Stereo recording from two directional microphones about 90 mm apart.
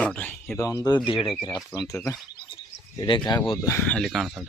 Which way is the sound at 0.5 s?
30° left (ahead or behind).